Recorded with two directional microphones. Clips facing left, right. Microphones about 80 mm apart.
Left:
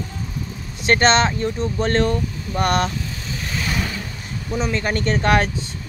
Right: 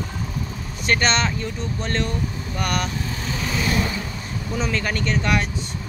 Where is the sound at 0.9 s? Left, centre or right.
Left.